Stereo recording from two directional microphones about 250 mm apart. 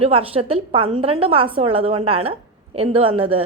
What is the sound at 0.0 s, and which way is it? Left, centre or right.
A woman's voice, right.